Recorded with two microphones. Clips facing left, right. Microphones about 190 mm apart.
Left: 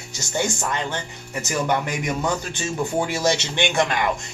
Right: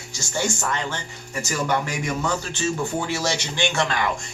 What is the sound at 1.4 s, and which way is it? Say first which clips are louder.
A man's voice: left 1 dB; 20° left (ahead or behind).